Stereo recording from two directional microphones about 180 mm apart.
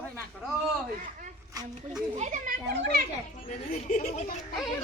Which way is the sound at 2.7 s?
70° right (ahead or behind).